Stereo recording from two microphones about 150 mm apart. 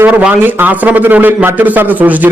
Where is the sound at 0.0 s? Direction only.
10° right (ahead or behind).